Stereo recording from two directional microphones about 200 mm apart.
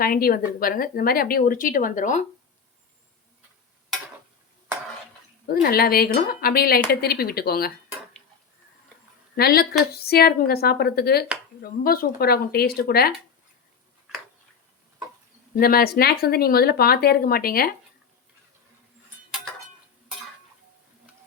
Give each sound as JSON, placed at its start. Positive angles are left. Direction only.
{"t": 0.0, "sound": "speech", "side_deg": 50}
{"t": 5.5, "sound": "speech", "side_deg": 50}
{"t": 9.3, "sound": "speech", "side_deg": 50}
{"t": 15.5, "sound": "speech", "side_deg": 50}